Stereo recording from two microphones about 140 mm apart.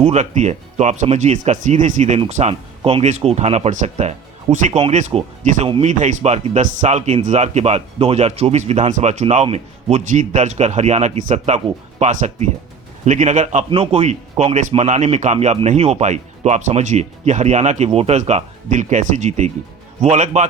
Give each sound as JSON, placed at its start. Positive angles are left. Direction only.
{"t": 0.0, "sound": "speech", "side_deg": -55}
{"t": 13.7, "sound": "speech", "side_deg": -45}